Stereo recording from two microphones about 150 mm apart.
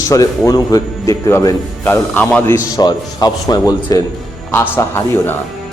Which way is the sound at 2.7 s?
25° left (ahead or behind).